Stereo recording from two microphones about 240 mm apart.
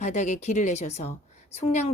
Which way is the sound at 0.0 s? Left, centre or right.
Left.